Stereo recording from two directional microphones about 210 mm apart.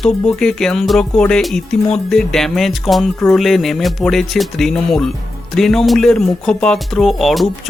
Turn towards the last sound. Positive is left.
turn(degrees=0)  # may be behind; listen again after turning